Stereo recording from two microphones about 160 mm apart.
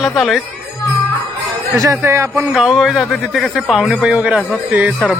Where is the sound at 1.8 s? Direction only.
20° right (ahead or behind).